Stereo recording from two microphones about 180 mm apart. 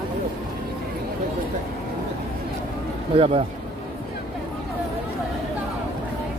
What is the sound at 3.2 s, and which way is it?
Speech, 30° right (ahead or behind).